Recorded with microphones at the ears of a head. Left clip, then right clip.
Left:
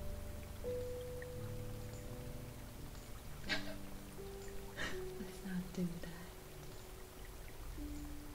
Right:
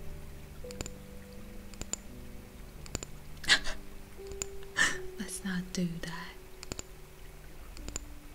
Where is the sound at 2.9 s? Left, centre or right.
Right.